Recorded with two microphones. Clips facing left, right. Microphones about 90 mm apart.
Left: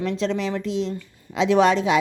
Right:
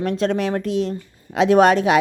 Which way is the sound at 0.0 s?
50° right (ahead or behind).